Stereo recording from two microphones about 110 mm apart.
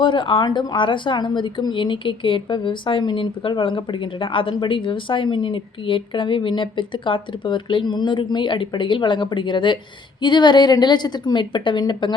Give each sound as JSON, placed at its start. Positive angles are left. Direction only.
{"t": 0.0, "sound": "a woman's voice", "side_deg": 45}